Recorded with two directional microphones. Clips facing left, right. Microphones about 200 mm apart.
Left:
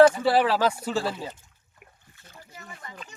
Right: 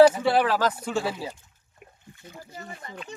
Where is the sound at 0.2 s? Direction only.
5° left (ahead or behind).